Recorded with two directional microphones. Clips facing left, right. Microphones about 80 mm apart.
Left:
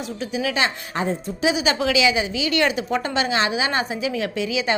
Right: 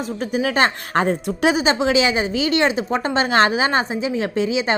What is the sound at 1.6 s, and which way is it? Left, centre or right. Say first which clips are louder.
Speech: right 2 dB; right.